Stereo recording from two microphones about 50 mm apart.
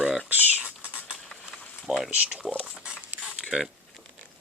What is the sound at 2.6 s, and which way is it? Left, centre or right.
Pig, right.